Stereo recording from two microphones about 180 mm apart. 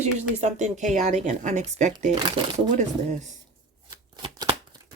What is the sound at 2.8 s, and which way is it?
Speech, 40° right (ahead or behind).